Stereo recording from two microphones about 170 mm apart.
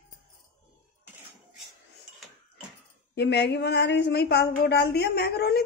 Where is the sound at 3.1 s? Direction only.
90° left.